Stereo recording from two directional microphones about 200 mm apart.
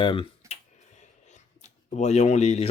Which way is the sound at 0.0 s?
25° left (ahead or behind).